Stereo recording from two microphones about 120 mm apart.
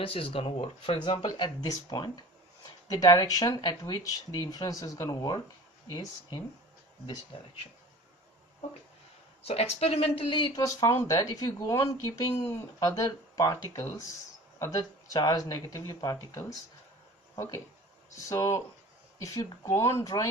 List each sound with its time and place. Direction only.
0.0 s speech: 50° left (ahead or behind); by 5.4 s 35° left (ahead or behind)
7.3 s speech: 45° left (ahead or behind)
9.5 s speech: 60° left (ahead or behind); by 10.6 s 40° left (ahead or behind)
10.8 s speech: 30° left (ahead or behind)